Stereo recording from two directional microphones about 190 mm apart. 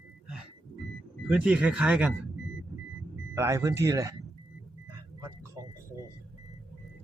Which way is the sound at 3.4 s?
15° right (ahead or behind).